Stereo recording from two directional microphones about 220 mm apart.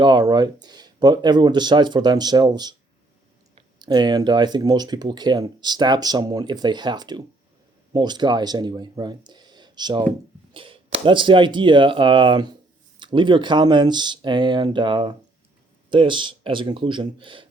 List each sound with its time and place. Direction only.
0.0 s speech: 20° right (ahead or behind)